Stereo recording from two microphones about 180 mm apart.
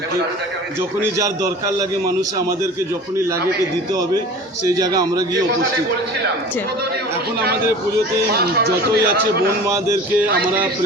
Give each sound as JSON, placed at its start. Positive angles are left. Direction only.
{"t": 4.6, "sound": "a man's voice", "side_deg": -20}
{"t": 8.3, "sound": "a man's voice", "side_deg": -60}